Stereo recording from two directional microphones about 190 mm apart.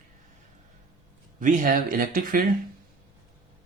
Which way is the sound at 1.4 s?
45° right (ahead or behind).